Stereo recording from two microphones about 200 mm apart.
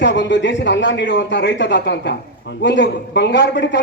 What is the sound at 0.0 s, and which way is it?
A man's voice, 65° left (ahead or behind).